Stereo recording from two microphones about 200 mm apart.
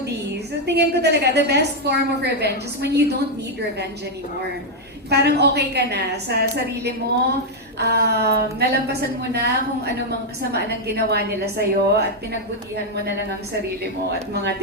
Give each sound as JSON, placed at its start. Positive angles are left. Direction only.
{"t": 0.6, "sound": "a woman's voice", "side_deg": -55}
{"t": 5.0, "sound": "a woman's voice", "side_deg": -55}